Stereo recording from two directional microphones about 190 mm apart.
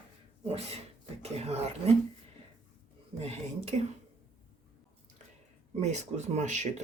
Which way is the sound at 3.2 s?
35° right (ahead or behind).